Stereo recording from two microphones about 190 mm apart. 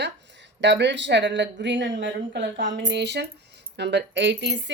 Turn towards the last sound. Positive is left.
turn(degrees=-70)  # may be behind; listen again after turning